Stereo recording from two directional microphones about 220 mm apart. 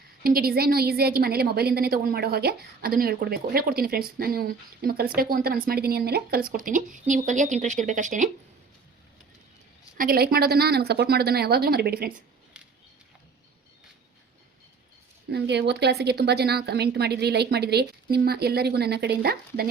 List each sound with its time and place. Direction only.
0.2 s a woman's voice: 40° right (ahead or behind)
10.0 s a woman's voice: 45° right (ahead or behind)
15.3 s a woman's voice: 50° right (ahead or behind)